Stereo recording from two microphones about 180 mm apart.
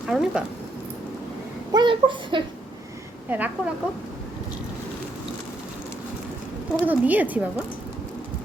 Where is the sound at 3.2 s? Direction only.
10° right (ahead or behind).